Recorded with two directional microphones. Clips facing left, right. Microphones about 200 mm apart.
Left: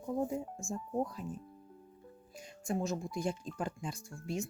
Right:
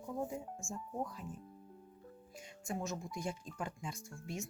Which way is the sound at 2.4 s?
35° left (ahead or behind).